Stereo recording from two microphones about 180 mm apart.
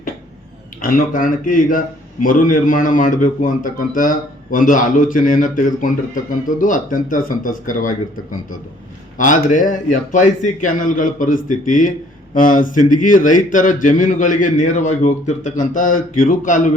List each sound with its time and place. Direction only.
0.8 s a man's voice: 50° left (ahead or behind)
9.1 s a man's voice: 45° left (ahead or behind)